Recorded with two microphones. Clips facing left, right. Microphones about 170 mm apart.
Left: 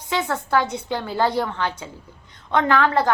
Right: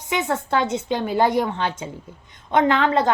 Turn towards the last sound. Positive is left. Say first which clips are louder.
# right 1 dB
turn(degrees=-20)  # may be behind; listen again after turning